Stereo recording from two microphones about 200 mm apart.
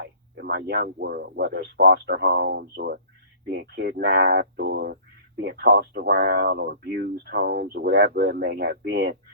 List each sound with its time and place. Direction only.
0.0 s speech: 60° right (ahead or behind)